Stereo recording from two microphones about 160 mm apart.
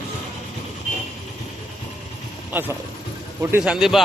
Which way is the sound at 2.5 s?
15° right (ahead or behind).